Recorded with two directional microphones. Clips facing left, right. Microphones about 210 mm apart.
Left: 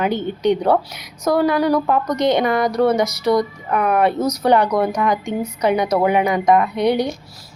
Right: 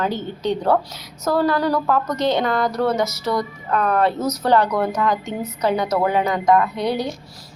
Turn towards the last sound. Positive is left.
turn(degrees=15)  # may be behind; listen again after turning